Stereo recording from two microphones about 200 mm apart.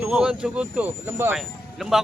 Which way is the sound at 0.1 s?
5° right (ahead or behind).